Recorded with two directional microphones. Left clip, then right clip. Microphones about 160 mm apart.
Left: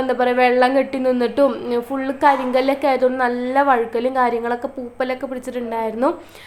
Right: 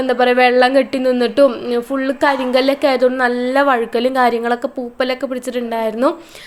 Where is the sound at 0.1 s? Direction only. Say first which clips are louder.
Right 4 dB; 20° right (ahead or behind).